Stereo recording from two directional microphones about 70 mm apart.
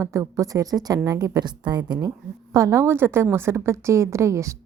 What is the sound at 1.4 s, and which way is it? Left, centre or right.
A woman's voice, right.